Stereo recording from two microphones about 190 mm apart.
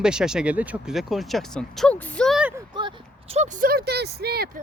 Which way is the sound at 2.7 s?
30° right (ahead or behind).